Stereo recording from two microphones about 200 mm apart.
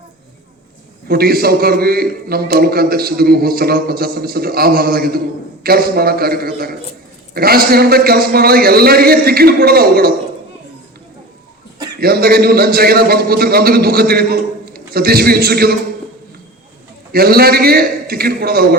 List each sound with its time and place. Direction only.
1.0 s a man's voice: 50° right (ahead or behind)
11.9 s a man's voice: 50° right (ahead or behind)
17.1 s a man's voice: 50° right (ahead or behind)